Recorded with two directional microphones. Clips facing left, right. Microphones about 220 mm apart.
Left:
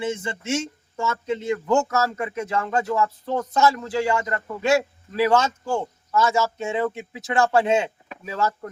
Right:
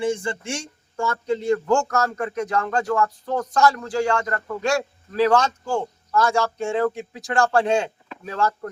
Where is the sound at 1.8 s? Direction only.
5° left (ahead or behind).